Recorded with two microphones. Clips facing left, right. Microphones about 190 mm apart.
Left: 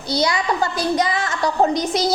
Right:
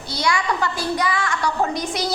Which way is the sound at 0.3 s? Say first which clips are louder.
Left 1 dB; 20° left (ahead or behind).